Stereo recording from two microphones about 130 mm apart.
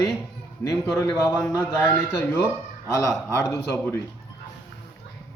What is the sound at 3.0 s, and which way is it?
Speech, 20° left (ahead or behind).